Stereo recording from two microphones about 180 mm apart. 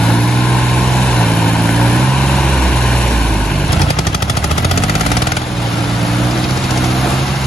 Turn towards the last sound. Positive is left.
turn(degrees=0)  # may be behind; listen again after turning